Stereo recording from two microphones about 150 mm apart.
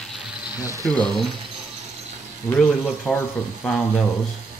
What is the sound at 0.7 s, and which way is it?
Speech, 25° right (ahead or behind).